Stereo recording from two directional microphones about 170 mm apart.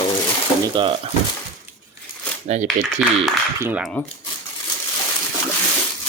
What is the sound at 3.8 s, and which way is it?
Speech, 5° left (ahead or behind).